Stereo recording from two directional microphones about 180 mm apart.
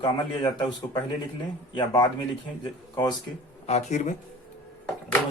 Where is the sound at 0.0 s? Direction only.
30° left (ahead or behind).